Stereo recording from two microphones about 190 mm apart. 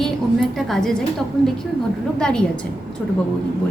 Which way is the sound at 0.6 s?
Centre (ahead or behind).